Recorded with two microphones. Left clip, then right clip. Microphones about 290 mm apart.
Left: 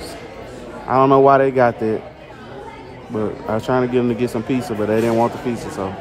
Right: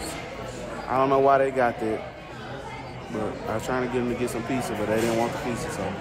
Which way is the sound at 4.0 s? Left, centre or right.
Left.